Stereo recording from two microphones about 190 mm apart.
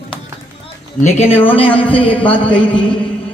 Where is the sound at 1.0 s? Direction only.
35° left (ahead or behind).